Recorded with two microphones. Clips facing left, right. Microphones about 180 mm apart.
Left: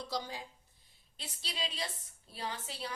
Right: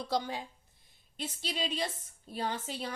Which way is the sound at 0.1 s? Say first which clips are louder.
Right 7 dB; 60° right (ahead or behind).